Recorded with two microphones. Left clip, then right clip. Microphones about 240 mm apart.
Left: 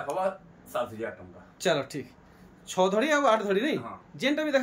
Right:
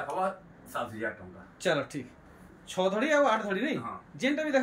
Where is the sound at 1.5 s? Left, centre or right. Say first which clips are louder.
Left 2 dB; centre.